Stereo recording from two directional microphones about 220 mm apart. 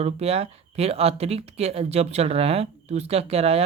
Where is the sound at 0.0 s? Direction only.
30° right (ahead or behind).